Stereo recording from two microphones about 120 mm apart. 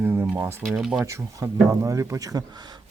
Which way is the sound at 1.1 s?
25° right (ahead or behind).